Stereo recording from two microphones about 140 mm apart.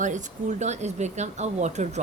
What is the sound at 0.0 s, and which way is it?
Speech, 60° right (ahead or behind).